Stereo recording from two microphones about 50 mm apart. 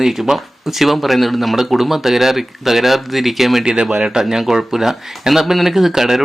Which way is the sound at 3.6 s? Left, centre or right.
Centre.